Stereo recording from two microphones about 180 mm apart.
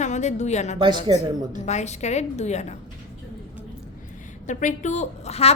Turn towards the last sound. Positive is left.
turn(degrees=35)  # may be behind; listen again after turning